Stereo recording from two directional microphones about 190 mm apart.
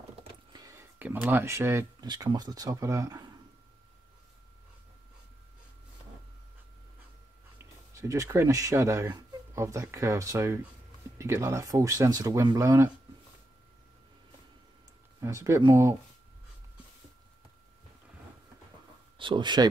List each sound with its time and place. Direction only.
0.2 s speech: 20° right (ahead or behind)
7.9 s speech: 15° right (ahead or behind)
15.1 s speech: 15° right (ahead or behind)
19.1 s speech: 25° right (ahead or behind)